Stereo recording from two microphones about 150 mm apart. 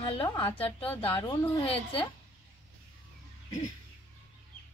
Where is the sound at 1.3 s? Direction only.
35° left (ahead or behind).